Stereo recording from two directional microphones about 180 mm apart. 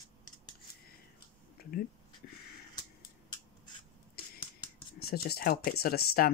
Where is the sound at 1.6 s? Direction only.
60° left (ahead or behind).